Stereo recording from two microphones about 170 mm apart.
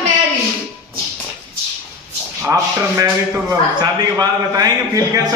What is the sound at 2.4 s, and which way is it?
A man's voice, 15° right (ahead or behind).